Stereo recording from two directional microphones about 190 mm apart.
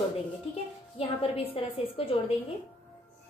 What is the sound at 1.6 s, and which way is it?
Speech, 30° left (ahead or behind).